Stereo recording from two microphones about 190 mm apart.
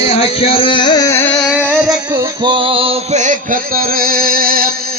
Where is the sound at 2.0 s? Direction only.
15° right (ahead or behind).